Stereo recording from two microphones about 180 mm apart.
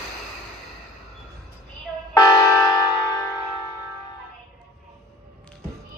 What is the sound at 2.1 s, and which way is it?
Church bell, 20° left (ahead or behind).